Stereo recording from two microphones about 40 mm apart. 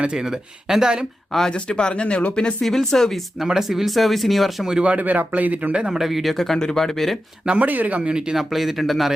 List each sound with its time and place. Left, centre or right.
0.7 s speech: centre
1.5 s speech: left
2.6 s speech: centre
3.4 s speech: centre
4.8 s speech: right
5.7 s a man's voice: right
6.0 s speech: centre
6.3 s speech: centre
7.4 s speech: right
7.7 s speech: right
8.4 s speech: centre